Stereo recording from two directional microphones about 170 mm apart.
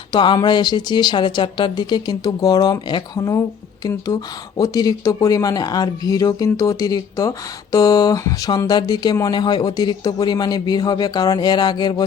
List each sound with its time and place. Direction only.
0.1 s speech: 25° left (ahead or behind)